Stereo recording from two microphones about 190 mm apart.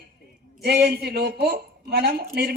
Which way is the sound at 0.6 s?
60° right (ahead or behind).